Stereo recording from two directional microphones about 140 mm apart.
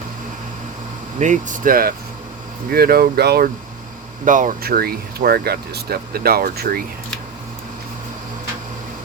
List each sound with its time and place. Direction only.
1.2 s speech: 65° right (ahead or behind); by 3.5 s 90° right
4.3 s speech: 70° right (ahead or behind); by 6.8 s 90° right